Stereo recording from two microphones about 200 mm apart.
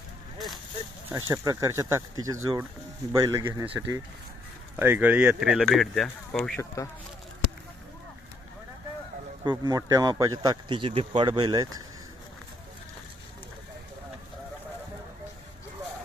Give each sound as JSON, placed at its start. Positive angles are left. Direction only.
{"t": 1.1, "sound": "speech", "side_deg": -15}
{"t": 9.4, "sound": "speech", "side_deg": -20}